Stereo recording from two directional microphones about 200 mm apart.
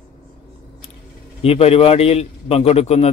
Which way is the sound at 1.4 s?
30° left (ahead or behind).